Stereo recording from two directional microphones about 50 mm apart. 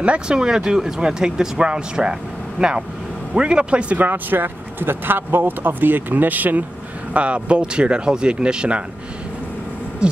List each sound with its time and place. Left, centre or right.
0.0 s speech: right
0.4 s speech: centre
4.0 s speech: right
7.2 s speech: right